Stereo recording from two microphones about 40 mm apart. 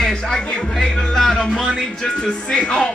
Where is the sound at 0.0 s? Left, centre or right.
Centre.